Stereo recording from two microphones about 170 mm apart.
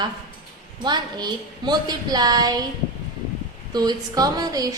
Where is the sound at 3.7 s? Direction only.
25° right (ahead or behind).